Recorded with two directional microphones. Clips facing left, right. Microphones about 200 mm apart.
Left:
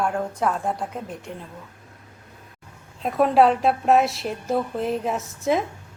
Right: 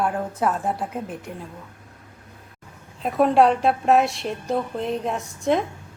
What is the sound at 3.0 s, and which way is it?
Speech, centre (ahead or behind).